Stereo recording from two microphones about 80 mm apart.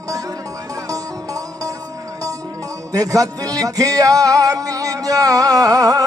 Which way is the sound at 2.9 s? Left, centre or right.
Right.